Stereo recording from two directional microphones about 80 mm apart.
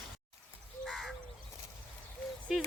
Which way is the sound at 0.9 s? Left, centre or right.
Centre.